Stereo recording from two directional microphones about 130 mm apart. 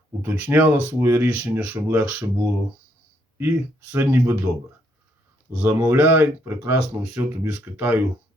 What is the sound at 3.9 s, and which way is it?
Speech, 20° right (ahead or behind).